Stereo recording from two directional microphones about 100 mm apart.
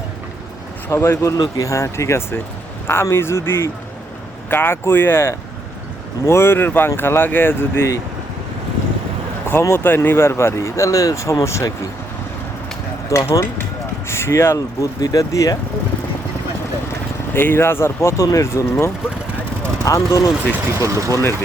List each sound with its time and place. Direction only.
0.9 s speech: 25° left (ahead or behind)
1.4 s speech: 35° left (ahead or behind)
9.5 s speech: 25° left (ahead or behind)
13.1 s speech: 30° left (ahead or behind)
17.3 s speech: 20° left (ahead or behind)
20.7 s speech: 30° right (ahead or behind)
21.1 s speech: 30° left (ahead or behind)